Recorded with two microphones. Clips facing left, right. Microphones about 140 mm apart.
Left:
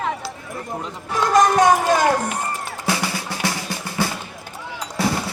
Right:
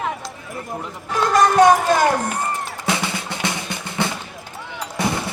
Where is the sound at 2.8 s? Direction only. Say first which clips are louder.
Even; 20° right (ahead or behind).